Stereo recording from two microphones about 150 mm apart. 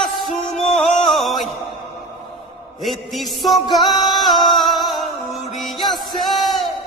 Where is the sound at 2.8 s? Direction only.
Centre (ahead or behind).